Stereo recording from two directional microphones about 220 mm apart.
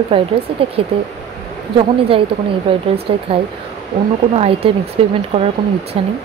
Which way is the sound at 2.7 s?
25° right (ahead or behind).